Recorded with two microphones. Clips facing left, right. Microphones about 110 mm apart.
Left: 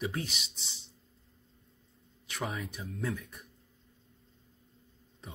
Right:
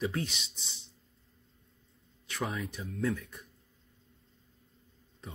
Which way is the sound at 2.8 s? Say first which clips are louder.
Right 5 dB; 25° left (ahead or behind).